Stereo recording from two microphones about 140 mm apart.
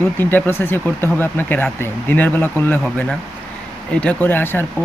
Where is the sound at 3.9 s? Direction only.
10° left (ahead or behind).